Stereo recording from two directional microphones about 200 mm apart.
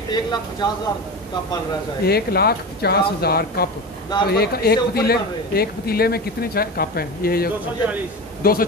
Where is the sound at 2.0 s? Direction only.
50° left (ahead or behind).